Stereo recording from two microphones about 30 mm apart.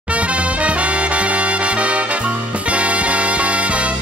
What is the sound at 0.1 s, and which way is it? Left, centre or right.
Music, right.